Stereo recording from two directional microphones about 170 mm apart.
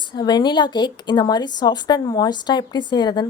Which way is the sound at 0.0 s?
25° left (ahead or behind).